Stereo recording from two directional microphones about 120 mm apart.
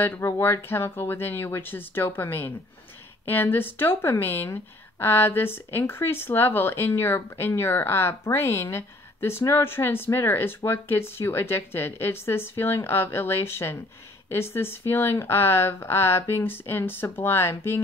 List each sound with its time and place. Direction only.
0.0 s speech: 20° left (ahead or behind)